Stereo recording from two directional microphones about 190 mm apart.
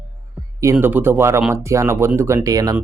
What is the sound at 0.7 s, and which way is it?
Speech, 10° right (ahead or behind).